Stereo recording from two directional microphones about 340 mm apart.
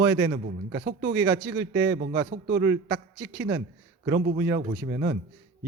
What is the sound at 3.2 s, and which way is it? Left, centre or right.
Speech, centre.